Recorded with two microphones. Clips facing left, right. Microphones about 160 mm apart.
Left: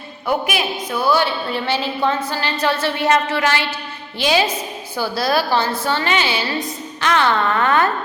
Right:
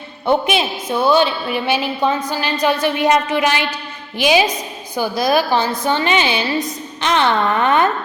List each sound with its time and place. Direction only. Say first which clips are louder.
0.3 s a woman's voice: right 4 dB; 25° right (ahead or behind)